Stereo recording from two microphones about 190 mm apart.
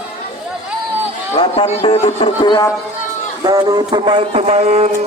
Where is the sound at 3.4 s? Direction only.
20° right (ahead or behind).